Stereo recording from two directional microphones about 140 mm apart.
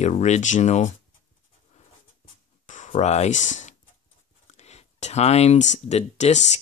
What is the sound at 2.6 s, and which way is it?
Speech, 60° left (ahead or behind).